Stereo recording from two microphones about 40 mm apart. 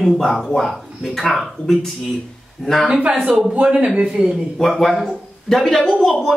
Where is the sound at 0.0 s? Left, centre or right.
Centre.